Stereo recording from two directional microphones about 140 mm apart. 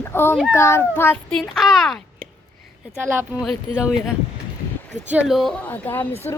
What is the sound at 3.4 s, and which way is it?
Speech, 5° right (ahead or behind).